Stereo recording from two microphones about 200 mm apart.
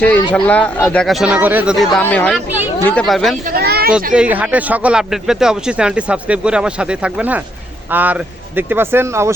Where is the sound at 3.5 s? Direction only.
50° right (ahead or behind).